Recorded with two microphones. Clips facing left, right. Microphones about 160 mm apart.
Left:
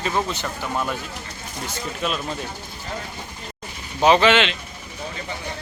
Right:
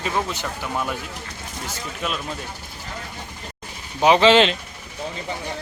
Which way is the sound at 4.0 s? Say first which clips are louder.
Even; 15° right (ahead or behind).